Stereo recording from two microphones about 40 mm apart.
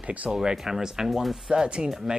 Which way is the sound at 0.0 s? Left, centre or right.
Right.